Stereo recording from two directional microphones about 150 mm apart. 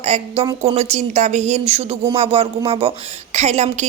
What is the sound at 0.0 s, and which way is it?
A woman's voice, 45° right (ahead or behind).